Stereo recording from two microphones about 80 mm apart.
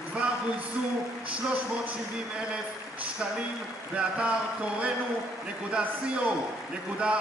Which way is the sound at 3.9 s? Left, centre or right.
Centre.